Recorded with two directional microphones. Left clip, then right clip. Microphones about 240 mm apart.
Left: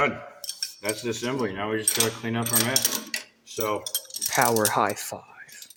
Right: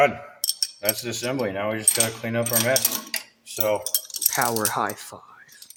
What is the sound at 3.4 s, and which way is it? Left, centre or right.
Cutlery, right.